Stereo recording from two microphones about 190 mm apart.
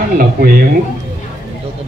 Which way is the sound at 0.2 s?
45° right (ahead or behind).